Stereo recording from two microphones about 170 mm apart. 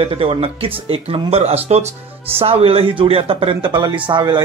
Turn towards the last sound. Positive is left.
turn(degrees=-25)  # may be behind; listen again after turning